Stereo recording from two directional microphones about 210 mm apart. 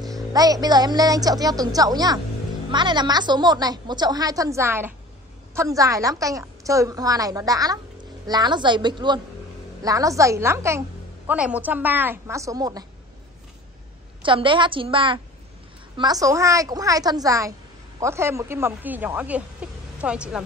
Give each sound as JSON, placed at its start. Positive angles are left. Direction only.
{"t": 0.0, "sound": "a woman's voice", "side_deg": -15}
{"t": 14.2, "sound": "a woman's voice", "side_deg": -25}